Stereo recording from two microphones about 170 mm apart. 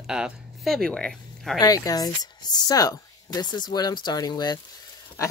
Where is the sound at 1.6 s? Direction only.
20° left (ahead or behind).